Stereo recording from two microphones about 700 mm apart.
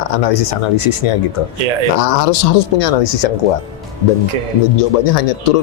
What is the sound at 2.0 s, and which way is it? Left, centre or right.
Speech, left.